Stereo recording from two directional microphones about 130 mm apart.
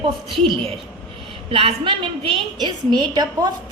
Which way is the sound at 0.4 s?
40° right (ahead or behind).